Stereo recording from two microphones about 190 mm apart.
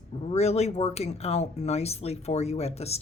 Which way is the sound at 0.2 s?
35° left (ahead or behind).